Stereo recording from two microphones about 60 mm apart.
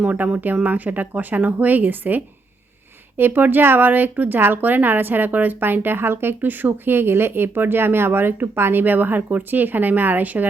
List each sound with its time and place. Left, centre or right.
0.0 s speech: right